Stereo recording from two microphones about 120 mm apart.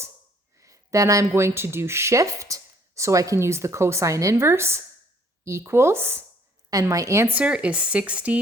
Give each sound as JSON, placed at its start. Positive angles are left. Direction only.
{"t": 0.6, "sound": "a sound", "side_deg": -25}
{"t": 1.3, "sound": "speech", "side_deg": -20}
{"t": 7.3, "sound": "speech", "side_deg": -10}